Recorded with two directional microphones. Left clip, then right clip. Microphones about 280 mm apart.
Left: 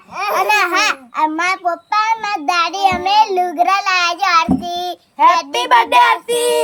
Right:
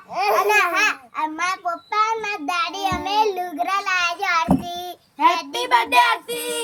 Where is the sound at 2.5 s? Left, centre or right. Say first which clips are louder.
Left 9 dB; centre.